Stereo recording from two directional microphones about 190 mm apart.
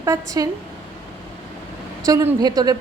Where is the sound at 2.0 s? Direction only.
20° right (ahead or behind).